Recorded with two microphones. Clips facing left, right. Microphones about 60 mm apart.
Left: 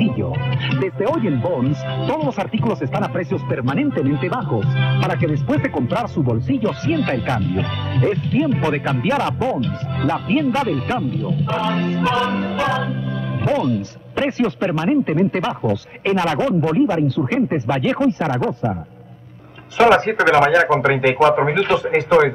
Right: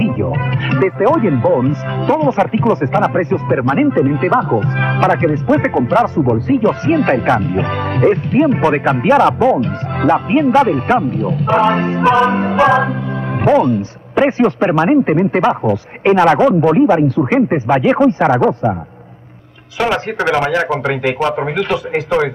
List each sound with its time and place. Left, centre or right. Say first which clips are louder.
0.0 s speech: right 4 dB; right
4.3 s speech: right 9 dB; right
4.6 s speech: right 6 dB; right
9.2 s speech: right 9 dB; right
9.6 s speech: right 5 dB; right
15.1 s speech: right 6 dB; right
17.1 s speech: right 6 dB; right
18.0 s speech: right 7 dB; right
19.8 s speech: left 4 dB; left
20.2 s a man's voice: left 2 dB; left